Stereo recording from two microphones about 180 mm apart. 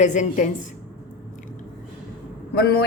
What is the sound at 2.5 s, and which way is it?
Speech, 65° left (ahead or behind).